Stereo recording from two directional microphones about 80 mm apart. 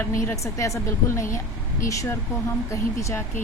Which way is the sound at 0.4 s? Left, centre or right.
Left.